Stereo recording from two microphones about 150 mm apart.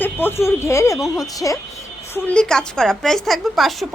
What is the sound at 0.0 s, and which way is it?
Speech, 15° left (ahead or behind).